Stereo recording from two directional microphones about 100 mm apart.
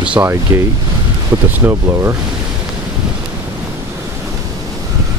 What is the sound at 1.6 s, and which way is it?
Speech, 25° right (ahead or behind).